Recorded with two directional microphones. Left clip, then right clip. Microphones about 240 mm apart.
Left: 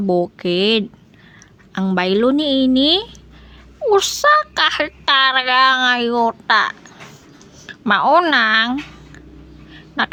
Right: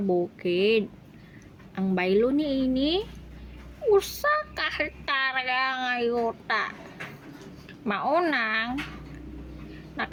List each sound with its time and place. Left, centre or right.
0.1 s speech: left
10.0 s speech: left